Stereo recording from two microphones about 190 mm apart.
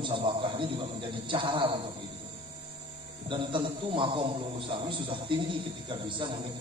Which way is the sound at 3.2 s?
25° right (ahead or behind).